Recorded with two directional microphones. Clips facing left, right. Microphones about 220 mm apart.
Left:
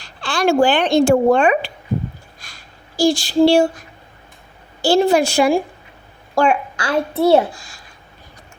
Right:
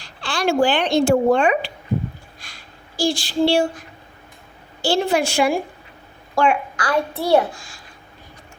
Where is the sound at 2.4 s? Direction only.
45° left (ahead or behind).